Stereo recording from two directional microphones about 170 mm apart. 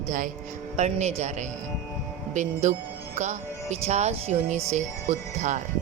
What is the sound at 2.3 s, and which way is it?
Speech, 45° right (ahead or behind).